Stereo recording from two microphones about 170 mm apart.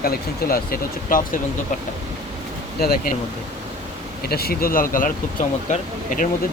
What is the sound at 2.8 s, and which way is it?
Speech, 65° left (ahead or behind).